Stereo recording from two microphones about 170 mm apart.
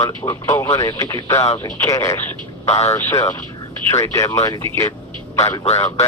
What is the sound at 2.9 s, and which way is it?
Speech, 20° left (ahead or behind).